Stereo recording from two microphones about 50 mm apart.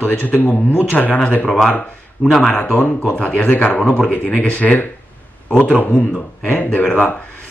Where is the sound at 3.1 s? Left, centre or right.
Left.